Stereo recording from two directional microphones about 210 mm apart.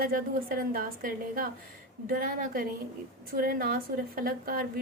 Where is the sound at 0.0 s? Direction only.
45° right (ahead or behind).